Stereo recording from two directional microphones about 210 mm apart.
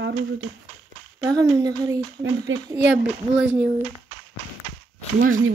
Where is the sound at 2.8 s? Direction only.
5° right (ahead or behind).